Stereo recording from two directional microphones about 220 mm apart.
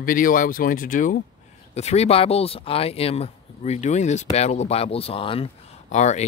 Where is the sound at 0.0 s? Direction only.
40° left (ahead or behind).